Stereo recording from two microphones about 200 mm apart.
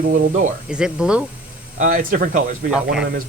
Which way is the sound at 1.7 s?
40° right (ahead or behind).